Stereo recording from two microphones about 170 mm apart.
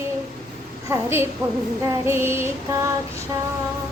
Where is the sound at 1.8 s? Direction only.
15° right (ahead or behind).